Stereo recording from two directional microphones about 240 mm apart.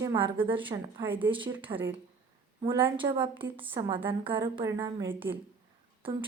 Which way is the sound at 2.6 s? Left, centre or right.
Right.